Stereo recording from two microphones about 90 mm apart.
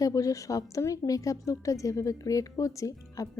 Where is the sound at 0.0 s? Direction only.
40° left (ahead or behind).